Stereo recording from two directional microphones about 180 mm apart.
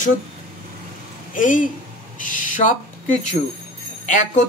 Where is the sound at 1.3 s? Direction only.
45° left (ahead or behind).